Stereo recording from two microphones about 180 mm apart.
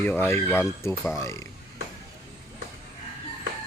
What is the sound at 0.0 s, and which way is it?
Speech, 10° left (ahead or behind).